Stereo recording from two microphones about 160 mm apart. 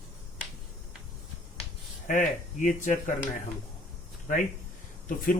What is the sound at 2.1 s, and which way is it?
Speech, 55° left (ahead or behind).